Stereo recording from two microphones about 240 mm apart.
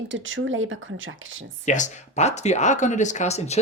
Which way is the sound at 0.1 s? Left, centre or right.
Right.